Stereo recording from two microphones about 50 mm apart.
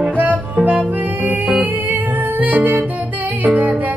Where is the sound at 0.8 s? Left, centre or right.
Right.